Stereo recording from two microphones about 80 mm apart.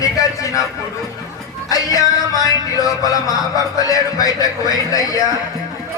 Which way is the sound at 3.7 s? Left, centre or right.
Left.